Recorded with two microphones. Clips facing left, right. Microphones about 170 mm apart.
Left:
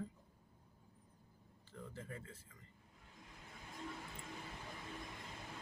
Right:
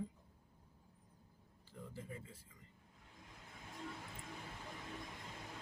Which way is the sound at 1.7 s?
10° right (ahead or behind).